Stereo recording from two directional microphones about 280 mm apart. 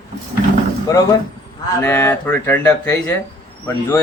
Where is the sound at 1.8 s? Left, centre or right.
Centre.